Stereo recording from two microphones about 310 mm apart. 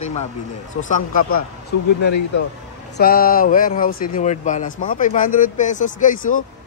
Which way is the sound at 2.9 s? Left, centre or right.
Left.